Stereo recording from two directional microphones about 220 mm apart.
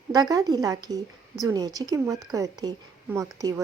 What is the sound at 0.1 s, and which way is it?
A woman's voice, 15° right (ahead or behind).